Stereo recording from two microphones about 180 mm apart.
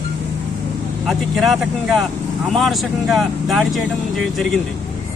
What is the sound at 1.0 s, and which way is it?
Speech, centre (ahead or behind).